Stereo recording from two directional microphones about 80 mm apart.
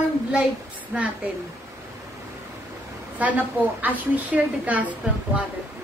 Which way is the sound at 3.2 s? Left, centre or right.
Right.